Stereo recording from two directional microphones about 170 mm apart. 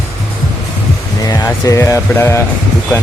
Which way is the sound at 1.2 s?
20° left (ahead or behind).